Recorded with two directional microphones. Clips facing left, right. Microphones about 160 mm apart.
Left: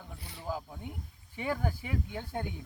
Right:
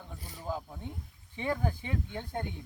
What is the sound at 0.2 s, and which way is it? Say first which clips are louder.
Snake: right 1 dB; 40° right (ahead or behind).